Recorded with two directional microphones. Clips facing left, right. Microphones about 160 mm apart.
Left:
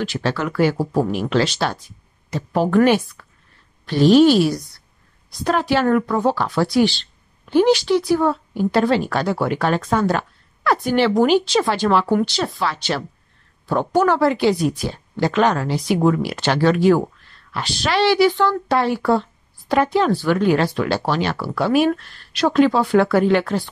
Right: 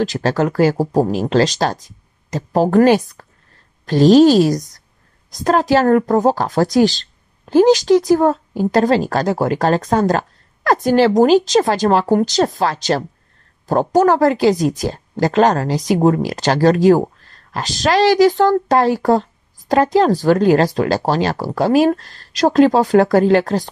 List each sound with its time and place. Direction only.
0.0 s a woman's voice: 40° right (ahead or behind)